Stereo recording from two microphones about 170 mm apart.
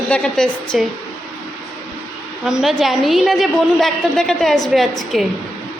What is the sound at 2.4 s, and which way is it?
A woman's voice, centre (ahead or behind).